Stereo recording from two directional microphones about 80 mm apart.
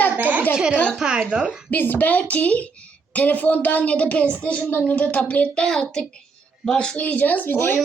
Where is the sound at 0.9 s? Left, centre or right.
Centre.